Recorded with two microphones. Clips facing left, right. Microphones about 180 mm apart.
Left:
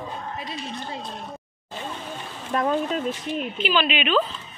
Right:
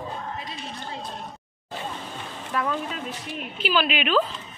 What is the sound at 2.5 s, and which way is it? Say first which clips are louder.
Speech: left 5 dB; 40° left (ahead or behind).